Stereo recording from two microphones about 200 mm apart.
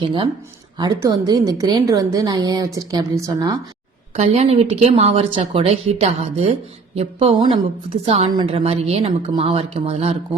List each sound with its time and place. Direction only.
0.0 s a woman's voice: 25° right (ahead or behind)
4.1 s a woman's voice: 35° right (ahead or behind)